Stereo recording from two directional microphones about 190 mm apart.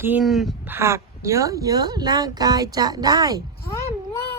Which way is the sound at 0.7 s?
15° right (ahead or behind).